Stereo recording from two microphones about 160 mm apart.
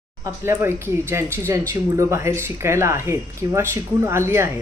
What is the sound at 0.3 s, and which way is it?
Speech, 15° right (ahead or behind).